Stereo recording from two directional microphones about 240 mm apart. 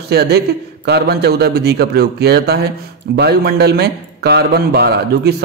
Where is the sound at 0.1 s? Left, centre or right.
Right.